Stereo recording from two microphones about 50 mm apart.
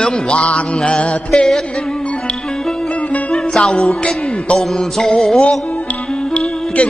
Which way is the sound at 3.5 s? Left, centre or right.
Centre.